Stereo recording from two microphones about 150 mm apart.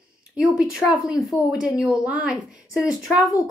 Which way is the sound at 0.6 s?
5° right (ahead or behind).